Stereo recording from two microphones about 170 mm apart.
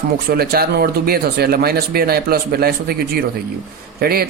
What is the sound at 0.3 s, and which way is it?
A man's voice, 65° right (ahead or behind).